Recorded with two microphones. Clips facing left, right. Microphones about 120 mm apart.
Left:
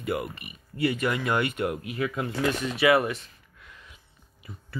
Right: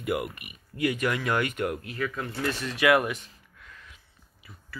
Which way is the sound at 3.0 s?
Centre (ahead or behind).